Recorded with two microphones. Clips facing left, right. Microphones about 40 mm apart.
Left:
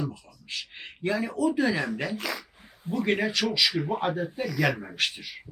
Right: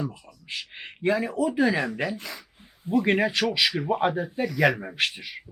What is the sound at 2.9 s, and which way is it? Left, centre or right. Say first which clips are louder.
A woman's voice: right 4 dB; right.